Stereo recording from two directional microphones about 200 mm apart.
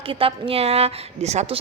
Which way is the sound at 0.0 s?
25° right (ahead or behind).